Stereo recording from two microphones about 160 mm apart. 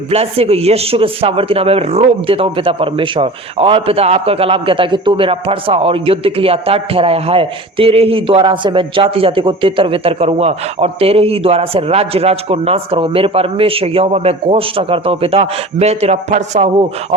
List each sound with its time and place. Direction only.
0.1 s a man's voice: 40° right (ahead or behind)